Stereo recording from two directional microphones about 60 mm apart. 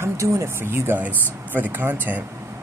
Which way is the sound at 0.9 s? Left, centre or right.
Right.